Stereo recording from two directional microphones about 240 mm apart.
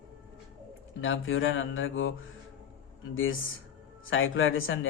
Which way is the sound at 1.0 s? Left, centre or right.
Left.